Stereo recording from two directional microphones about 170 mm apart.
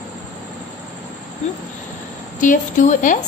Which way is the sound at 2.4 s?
50° left (ahead or behind).